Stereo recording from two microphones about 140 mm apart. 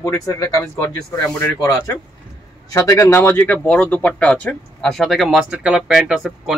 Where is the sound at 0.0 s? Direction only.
25° left (ahead or behind).